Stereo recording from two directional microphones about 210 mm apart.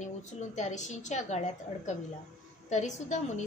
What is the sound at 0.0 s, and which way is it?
A woman's voice, 35° left (ahead or behind).